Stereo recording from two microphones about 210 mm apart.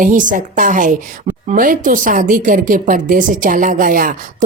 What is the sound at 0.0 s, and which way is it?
Speech, 40° right (ahead or behind).